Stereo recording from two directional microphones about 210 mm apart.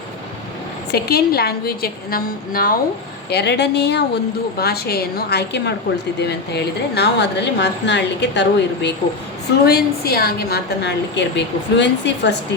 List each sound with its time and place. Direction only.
0.9 s a woman's voice: 50° left (ahead or behind)